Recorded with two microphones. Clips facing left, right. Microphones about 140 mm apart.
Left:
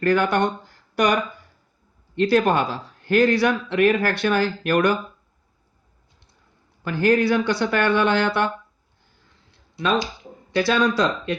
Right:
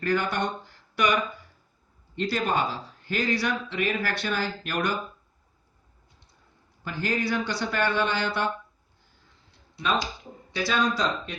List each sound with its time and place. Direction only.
0.0 s a man's voice: 70° left (ahead or behind)
1.0 s speech: 45° left (ahead or behind)
2.1 s a man's voice: 65° left (ahead or behind)
6.8 s a man's voice: 65° left (ahead or behind)
10.5 s speech: 65° left (ahead or behind)